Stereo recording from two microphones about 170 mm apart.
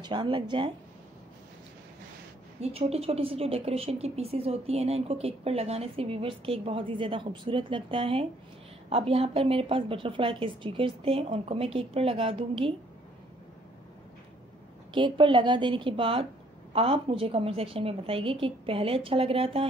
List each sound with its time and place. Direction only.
0.0 s a woman's voice: 30° right (ahead or behind)
2.6 s a woman's voice: 40° right (ahead or behind)
15.0 s a woman's voice: 30° right (ahead or behind)